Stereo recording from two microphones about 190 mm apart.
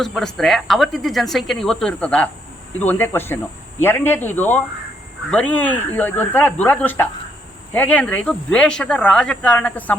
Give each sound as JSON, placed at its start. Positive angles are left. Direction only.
{"t": 0.0, "sound": "speech", "side_deg": 0}